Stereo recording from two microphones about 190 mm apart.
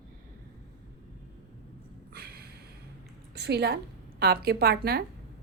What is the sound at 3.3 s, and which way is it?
A woman's voice, 60° right (ahead or behind).